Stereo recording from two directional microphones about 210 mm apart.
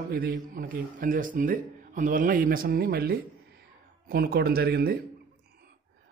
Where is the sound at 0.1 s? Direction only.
45° right (ahead or behind).